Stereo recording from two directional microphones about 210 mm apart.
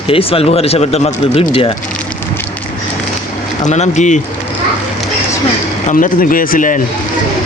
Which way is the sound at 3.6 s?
35° left (ahead or behind).